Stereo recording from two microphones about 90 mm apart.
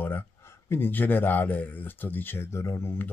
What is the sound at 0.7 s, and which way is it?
Speech, 25° left (ahead or behind).